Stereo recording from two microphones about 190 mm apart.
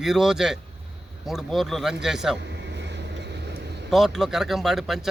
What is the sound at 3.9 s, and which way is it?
A man's voice, centre (ahead or behind).